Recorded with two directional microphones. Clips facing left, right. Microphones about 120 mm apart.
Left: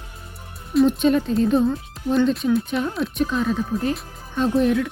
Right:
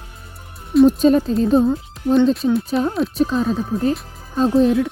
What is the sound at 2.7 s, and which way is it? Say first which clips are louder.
Speech: right 5 dB; 35° right (ahead or behind).